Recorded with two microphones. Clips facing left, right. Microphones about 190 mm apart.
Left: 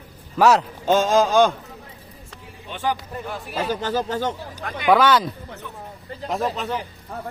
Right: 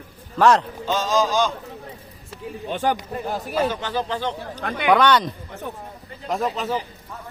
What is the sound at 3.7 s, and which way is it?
Speech, 40° left (ahead or behind).